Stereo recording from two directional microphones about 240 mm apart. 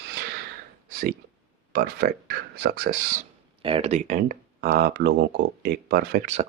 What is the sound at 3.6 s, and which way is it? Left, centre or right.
Speech, right.